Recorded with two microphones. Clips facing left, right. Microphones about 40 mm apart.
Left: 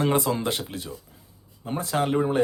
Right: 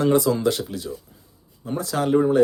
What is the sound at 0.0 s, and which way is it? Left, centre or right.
Speech, left.